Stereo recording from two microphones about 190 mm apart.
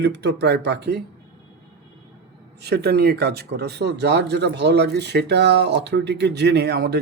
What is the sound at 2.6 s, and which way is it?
Speech, 60° right (ahead or behind).